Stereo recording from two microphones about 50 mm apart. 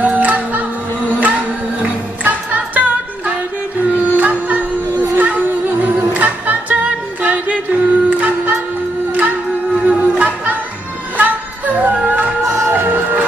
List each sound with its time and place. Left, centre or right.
0.0 s music: right
4.2 s music: right
9.8 s music: right
12.4 s music: right
12.7 s music: right